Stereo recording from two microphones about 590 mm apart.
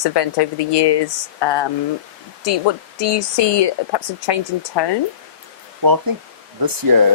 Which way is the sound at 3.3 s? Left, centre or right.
Left.